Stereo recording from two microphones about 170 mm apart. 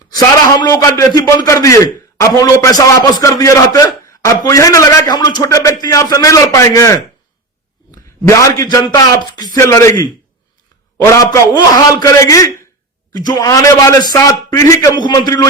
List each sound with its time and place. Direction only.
0.6 s a man's voice: 20° left (ahead or behind)
8.3 s a man's voice: 15° left (ahead or behind)